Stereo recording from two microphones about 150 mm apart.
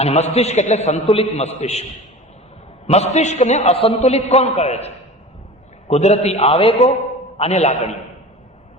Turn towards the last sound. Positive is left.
turn(degrees=45)  # may be behind; listen again after turning